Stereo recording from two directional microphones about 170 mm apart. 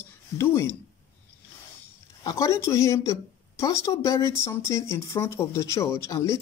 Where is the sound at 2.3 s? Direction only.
15° left (ahead or behind).